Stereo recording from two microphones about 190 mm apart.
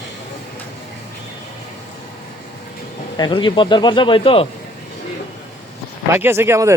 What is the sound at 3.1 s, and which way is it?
Speech, 25° left (ahead or behind).